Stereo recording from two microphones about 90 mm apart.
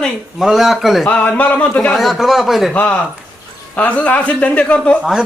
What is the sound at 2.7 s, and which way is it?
A man's voice, 15° left (ahead or behind).